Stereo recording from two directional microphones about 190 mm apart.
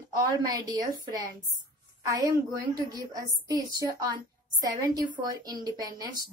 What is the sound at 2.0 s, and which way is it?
A woman's voice, 15° right (ahead or behind).